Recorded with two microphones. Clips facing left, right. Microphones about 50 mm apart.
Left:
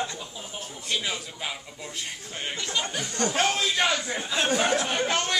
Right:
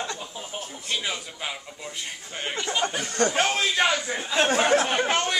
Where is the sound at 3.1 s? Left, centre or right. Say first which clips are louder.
Right 4 dB; right.